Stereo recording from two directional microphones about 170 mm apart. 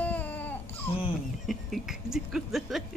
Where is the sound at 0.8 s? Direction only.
30° left (ahead or behind).